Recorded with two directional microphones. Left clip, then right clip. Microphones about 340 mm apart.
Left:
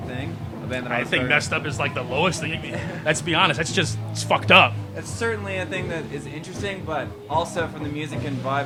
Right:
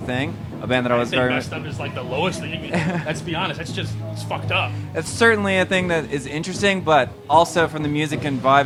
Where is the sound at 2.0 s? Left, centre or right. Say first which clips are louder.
Right 1 dB; left.